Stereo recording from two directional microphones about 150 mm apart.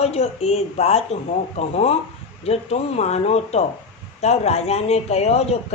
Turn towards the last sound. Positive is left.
turn(degrees=45)  # may be behind; listen again after turning